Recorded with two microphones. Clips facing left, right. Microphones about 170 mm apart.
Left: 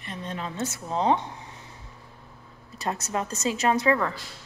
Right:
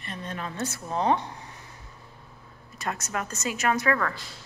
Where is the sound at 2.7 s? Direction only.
35° left (ahead or behind).